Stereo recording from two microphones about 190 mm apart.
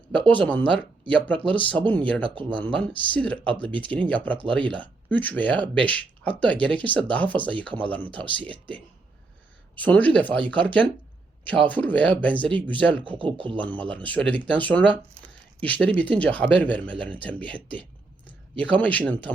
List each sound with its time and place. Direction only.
0.1 s speech: 5° left (ahead or behind)
9.7 s speech: 10° left (ahead or behind)